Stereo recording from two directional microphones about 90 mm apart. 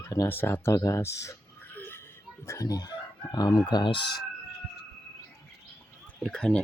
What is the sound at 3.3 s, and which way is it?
Speech, 55° left (ahead or behind).